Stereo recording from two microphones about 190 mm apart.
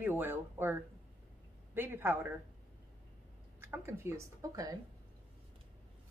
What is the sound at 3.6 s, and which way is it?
A woman's voice, 10° right (ahead or behind).